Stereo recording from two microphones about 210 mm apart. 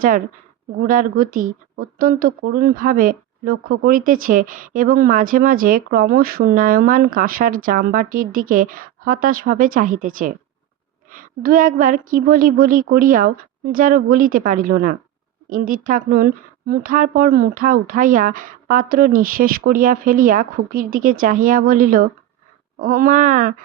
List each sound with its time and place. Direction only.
0.8 s speech: 45° right (ahead or behind)